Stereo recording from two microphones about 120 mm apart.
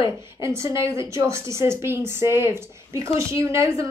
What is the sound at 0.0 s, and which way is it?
A woman's voice, 25° right (ahead or behind).